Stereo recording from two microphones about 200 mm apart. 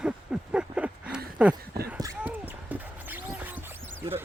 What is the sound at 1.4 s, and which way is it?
Speech, 5° right (ahead or behind).